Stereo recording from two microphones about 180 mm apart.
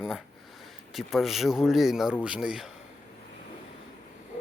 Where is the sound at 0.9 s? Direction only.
Centre (ahead or behind).